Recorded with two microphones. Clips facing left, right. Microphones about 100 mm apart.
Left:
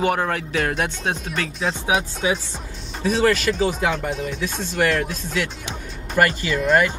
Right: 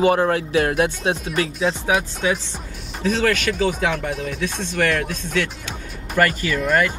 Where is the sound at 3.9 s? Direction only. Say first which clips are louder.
Even; 25° left (ahead or behind).